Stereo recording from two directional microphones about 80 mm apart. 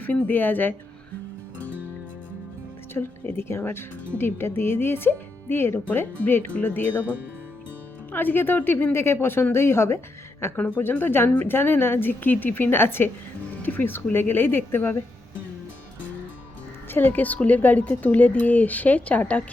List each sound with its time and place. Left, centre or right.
0.0 s speech: left
2.9 s speech: left
8.1 s speech: left
16.9 s speech: left